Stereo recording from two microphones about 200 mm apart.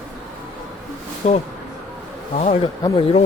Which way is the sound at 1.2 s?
35° left (ahead or behind).